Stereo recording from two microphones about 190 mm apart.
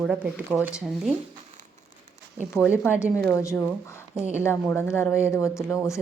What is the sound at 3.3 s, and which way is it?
A woman's voice, 15° left (ahead or behind).